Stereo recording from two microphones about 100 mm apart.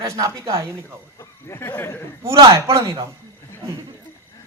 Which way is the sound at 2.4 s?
30° right (ahead or behind).